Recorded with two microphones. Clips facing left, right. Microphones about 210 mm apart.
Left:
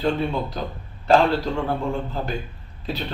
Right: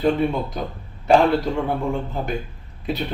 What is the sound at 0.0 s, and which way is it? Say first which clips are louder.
Speech: right 3 dB; 15° right (ahead or behind).